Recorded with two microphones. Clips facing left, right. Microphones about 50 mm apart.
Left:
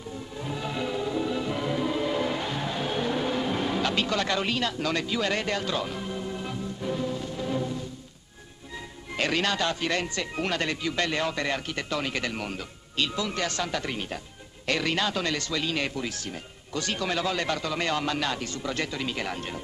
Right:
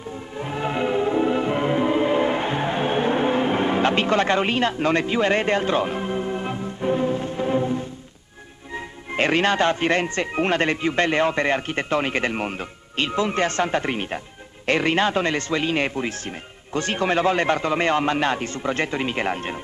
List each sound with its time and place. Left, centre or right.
0.4 s music: right
8.7 s speech: right